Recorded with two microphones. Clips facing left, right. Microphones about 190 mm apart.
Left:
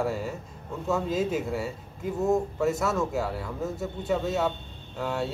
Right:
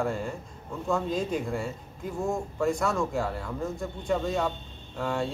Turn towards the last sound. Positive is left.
turn(degrees=5)  # may be behind; listen again after turning